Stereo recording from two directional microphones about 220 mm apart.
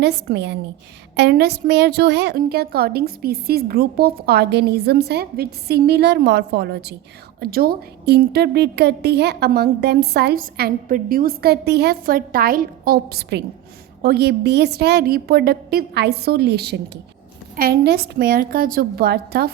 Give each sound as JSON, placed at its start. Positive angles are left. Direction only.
{"t": 0.0, "sound": "a woman's voice", "side_deg": -50}